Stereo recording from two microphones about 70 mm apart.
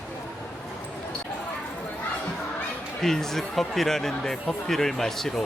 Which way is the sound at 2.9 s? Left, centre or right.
Centre.